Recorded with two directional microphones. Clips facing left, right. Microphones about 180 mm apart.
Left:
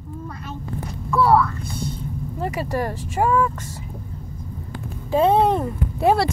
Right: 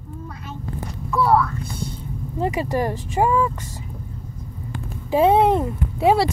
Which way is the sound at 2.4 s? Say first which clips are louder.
Right 3 dB; 20° right (ahead or behind).